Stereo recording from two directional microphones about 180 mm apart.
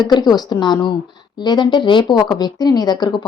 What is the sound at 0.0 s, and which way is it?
Speech, 25° left (ahead or behind).